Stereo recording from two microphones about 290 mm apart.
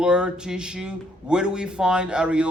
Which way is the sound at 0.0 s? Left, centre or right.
Centre.